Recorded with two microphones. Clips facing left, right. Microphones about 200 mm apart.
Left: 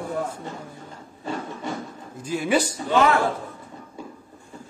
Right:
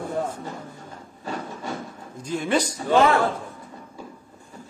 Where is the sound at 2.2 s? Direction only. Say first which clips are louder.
Left 1 dB; 5° left (ahead or behind).